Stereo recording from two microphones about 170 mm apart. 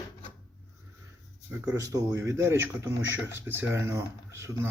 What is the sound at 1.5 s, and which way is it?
A man's voice, 15° right (ahead or behind).